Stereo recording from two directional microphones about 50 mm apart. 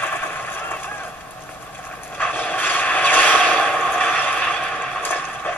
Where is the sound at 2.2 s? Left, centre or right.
Left.